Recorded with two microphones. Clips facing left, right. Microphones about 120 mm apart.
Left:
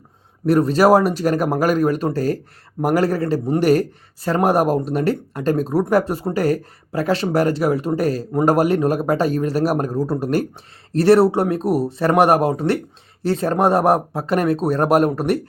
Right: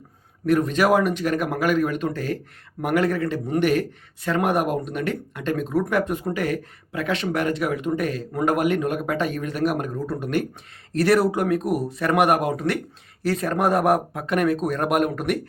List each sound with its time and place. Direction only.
0.4 s a man's voice: 35° left (ahead or behind)